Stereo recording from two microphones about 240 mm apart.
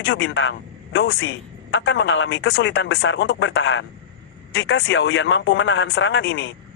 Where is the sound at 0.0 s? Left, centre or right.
Left.